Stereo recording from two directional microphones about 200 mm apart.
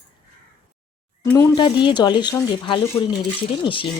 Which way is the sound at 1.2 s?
15° left (ahead or behind).